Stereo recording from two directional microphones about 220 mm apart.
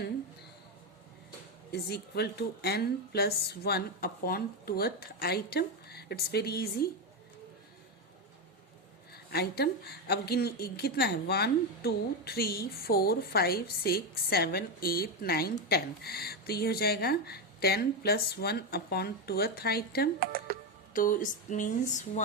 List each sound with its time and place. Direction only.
1.7 s a woman's voice: 45° left (ahead or behind)
9.3 s a woman's voice: 45° left (ahead or behind)
20.1 s speech: 40° right (ahead or behind)
20.9 s speech: 40° left (ahead or behind)